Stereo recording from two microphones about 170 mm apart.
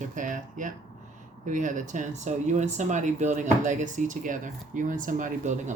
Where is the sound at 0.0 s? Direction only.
50° right (ahead or behind).